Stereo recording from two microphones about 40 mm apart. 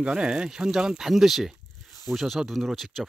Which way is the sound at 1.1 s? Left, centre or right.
Centre.